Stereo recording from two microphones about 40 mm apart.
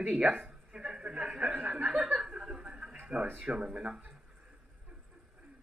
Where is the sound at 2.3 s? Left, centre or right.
Right.